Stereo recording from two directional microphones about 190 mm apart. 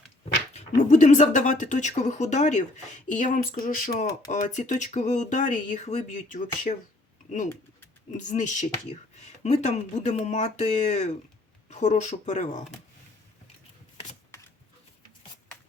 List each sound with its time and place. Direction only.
0.5 s speech: 40° left (ahead or behind)
8.1 s speech: 40° left (ahead or behind)